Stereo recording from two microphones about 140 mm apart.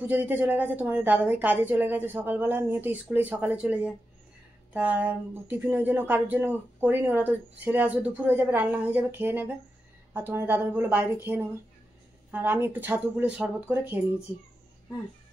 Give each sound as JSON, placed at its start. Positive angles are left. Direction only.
{"t": 0.0, "sound": "speech", "side_deg": -10}